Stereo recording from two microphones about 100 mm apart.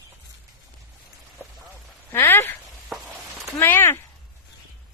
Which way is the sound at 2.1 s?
25° left (ahead or behind).